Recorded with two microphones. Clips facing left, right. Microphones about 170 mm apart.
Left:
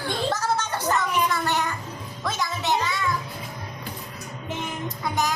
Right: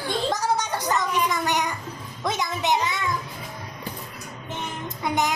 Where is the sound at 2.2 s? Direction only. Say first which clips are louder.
Right 2 dB; 20° right (ahead or behind).